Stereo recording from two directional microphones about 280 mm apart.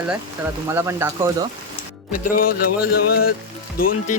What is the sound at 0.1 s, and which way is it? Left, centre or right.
Speech, centre.